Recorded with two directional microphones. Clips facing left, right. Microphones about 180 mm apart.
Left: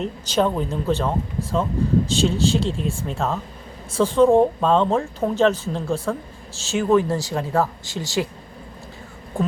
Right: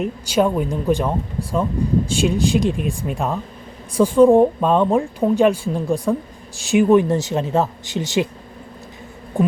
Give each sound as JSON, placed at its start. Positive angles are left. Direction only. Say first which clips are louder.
{"t": 0.0, "sound": "speech", "louder": "right 3 dB", "side_deg": -10}